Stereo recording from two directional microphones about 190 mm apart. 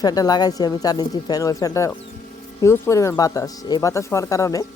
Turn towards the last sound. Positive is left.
turn(degrees=15)  # may be behind; listen again after turning